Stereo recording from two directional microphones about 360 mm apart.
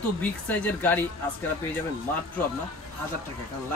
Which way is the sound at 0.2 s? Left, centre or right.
Centre.